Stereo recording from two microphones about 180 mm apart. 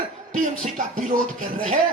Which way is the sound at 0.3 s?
45° right (ahead or behind).